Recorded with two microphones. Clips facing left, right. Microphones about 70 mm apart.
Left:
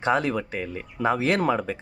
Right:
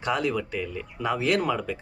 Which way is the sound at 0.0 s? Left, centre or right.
Left.